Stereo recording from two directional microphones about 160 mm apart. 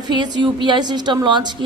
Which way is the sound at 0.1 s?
30° right (ahead or behind).